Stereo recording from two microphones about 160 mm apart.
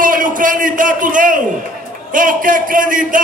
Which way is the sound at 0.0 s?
60° right (ahead or behind).